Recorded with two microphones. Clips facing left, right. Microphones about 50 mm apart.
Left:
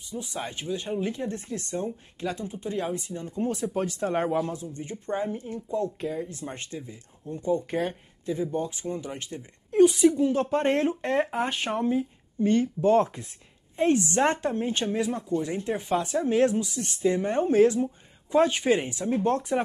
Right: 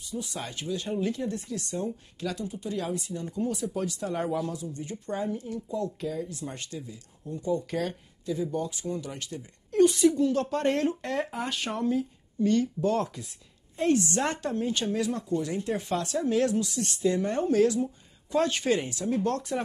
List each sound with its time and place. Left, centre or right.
0.1 s a woman's voice: left